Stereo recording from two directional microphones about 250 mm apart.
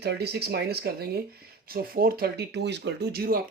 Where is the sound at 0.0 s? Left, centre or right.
Right.